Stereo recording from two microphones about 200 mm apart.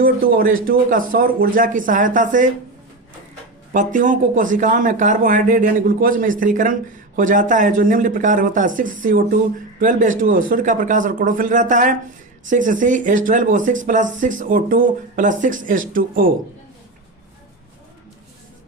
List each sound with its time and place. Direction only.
0.0 s a man's voice: 45° right (ahead or behind)
3.7 s speech: 40° right (ahead or behind)